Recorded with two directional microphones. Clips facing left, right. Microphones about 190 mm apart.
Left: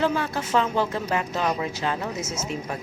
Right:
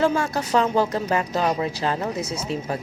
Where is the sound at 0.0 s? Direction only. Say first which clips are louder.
Right 3 dB; 40° right (ahead or behind).